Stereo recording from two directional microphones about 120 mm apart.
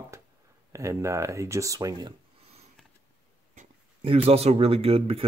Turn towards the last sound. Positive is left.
turn(degrees=-55)  # may be behind; listen again after turning